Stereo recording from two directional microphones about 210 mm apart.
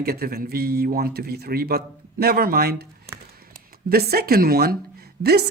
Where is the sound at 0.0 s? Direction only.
45° right (ahead or behind).